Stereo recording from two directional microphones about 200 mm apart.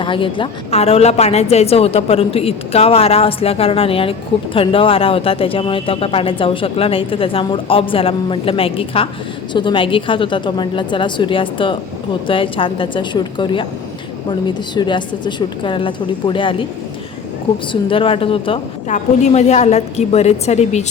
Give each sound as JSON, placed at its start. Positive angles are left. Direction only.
{"t": 0.0, "sound": "speech", "side_deg": 25}
{"t": 14.8, "sound": "speech", "side_deg": 20}
{"t": 17.7, "sound": "a woman's voice", "side_deg": 25}